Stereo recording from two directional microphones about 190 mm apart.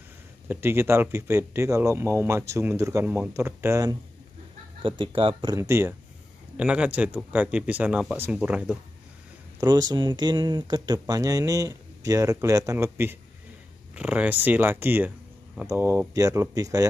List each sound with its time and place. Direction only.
0.5 s speech: 10° right (ahead or behind)
4.8 s speech: 25° right (ahead or behind); by 8.7 s 5° right (ahead or behind)
9.6 s speech: 20° right (ahead or behind)